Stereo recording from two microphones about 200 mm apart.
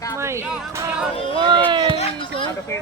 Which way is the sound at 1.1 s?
25° left (ahead or behind).